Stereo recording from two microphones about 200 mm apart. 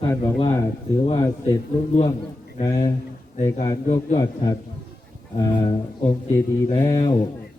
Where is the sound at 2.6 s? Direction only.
20° left (ahead or behind).